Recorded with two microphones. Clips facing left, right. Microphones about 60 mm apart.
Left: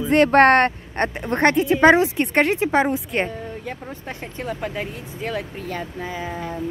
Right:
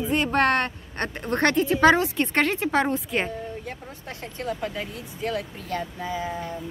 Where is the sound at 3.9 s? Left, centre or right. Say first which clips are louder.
Left 4 dB; left.